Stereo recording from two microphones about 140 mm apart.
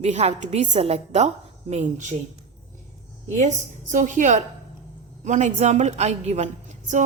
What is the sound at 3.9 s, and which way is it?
A woman's voice, 60° right (ahead or behind).